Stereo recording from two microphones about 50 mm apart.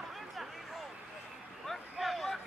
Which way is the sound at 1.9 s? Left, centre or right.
Centre.